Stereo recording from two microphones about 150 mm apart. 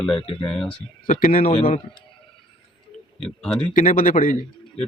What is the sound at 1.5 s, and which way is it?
Speech, 40° left (ahead or behind).